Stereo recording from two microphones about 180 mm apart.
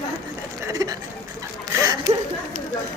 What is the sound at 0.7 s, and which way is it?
Speech, 20° right (ahead or behind).